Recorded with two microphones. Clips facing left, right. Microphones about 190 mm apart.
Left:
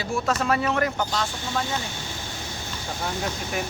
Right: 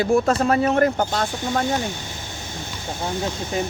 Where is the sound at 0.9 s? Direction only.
50° right (ahead or behind).